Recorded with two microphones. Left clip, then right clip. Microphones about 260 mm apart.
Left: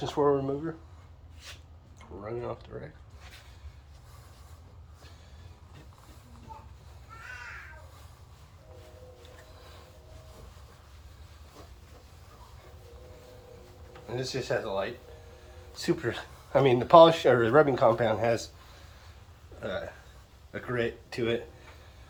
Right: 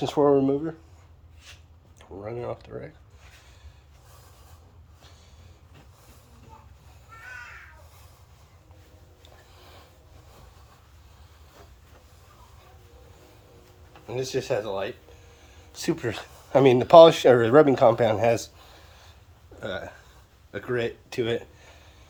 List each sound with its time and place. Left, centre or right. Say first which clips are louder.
0.0 s speech: right 6 dB; right
2.2 s speech: right 3 dB; right
14.1 s speech: right 4 dB; right